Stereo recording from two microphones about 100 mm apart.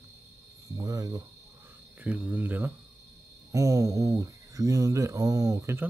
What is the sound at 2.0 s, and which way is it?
Speech, 15° right (ahead or behind).